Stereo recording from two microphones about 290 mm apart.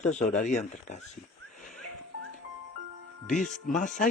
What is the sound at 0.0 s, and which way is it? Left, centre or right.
Speech, left.